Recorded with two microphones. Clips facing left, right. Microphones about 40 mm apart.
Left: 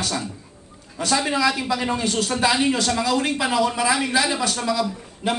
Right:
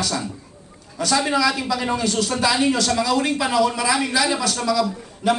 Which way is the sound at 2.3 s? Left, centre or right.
Centre.